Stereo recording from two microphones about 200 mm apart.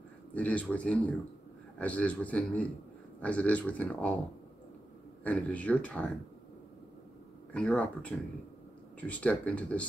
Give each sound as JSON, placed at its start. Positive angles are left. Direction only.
{"t": 0.3, "sound": "speech", "side_deg": 5}
{"t": 5.2, "sound": "speech", "side_deg": 5}
{"t": 7.5, "sound": "speech", "side_deg": 5}